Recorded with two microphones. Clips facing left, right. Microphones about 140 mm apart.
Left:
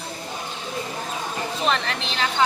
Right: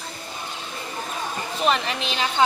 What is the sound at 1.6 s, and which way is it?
Speech, 10° right (ahead or behind).